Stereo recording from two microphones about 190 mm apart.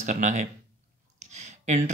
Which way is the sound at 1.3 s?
40° right (ahead or behind).